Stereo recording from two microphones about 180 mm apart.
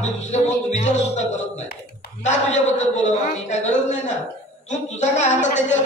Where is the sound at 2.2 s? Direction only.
40° left (ahead or behind).